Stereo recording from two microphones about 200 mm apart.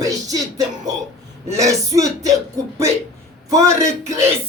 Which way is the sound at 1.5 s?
15° right (ahead or behind).